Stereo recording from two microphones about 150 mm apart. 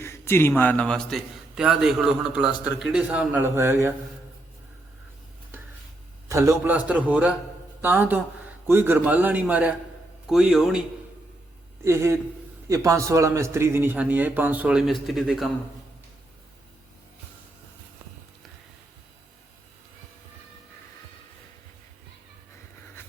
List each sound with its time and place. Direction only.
0.0 s a man's voice: 15° left (ahead or behind); by 3.9 s 15° right (ahead or behind)
6.2 s a man's voice: 20° right (ahead or behind); by 10.8 s centre (ahead or behind)
11.9 s a man's voice: 20° right (ahead or behind); by 15.4 s centre (ahead or behind)